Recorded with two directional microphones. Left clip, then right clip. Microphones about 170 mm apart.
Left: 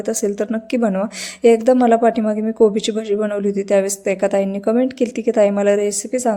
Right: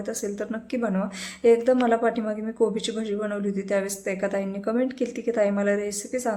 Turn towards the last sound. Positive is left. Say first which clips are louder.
# left 9 dB
turn(degrees=40)  # may be behind; listen again after turning